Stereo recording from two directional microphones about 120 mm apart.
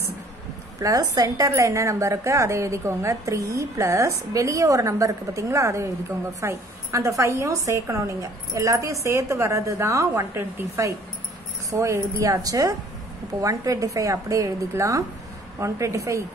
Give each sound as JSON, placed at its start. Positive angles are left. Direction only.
{"t": 0.7, "sound": "a woman's voice", "side_deg": -30}